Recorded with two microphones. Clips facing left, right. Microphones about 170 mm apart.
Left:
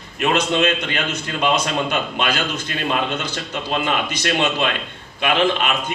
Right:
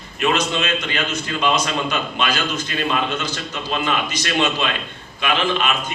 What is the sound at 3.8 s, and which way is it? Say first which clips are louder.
A man's voice: left 1 dB; 60° left (ahead or behind).